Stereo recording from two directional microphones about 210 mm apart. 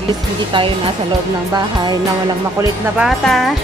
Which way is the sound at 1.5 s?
20° right (ahead or behind).